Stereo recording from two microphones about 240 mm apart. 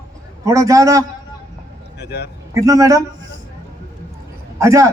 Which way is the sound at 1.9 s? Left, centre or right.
Left.